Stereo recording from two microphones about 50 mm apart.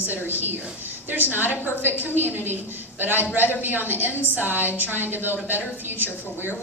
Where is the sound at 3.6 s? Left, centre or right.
Right.